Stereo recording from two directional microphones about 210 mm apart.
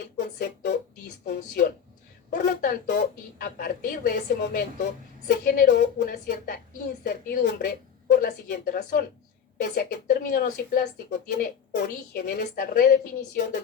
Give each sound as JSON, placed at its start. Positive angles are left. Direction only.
{"t": 0.3, "sound": "a woman's voice", "side_deg": 50}